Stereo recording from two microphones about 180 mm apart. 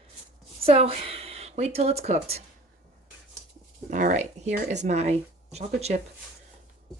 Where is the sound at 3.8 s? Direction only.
45° right (ahead or behind).